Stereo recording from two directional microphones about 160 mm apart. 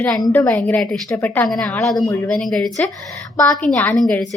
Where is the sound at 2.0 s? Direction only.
20° left (ahead or behind).